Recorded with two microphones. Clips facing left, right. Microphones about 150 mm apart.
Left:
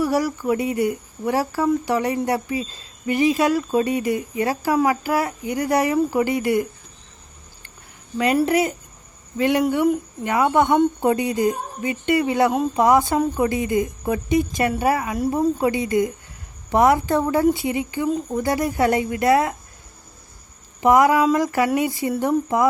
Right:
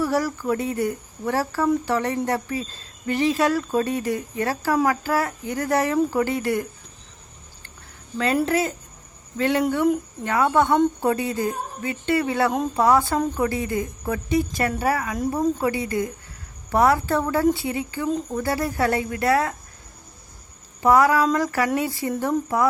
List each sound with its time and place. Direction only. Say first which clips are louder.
0.0 s speech: left 2 dB; 10° left (ahead or behind)
8.4 s speech: left 3 dB; 15° left (ahead or behind)
20.8 s speech: left 2 dB; 20° left (ahead or behind)